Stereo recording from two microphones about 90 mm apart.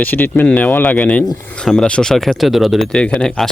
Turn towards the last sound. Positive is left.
turn(degrees=5)  # may be behind; listen again after turning